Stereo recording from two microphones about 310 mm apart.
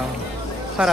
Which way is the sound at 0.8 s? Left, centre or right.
Centre.